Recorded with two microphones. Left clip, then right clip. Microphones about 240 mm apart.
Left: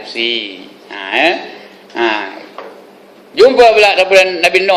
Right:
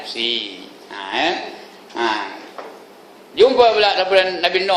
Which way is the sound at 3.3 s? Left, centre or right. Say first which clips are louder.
Left 6 dB; left.